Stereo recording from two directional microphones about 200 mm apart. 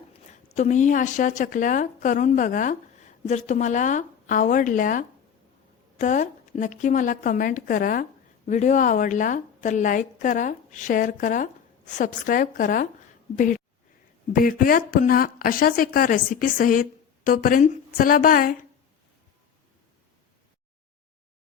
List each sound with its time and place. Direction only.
0.4 s a woman's voice: 35° left (ahead or behind)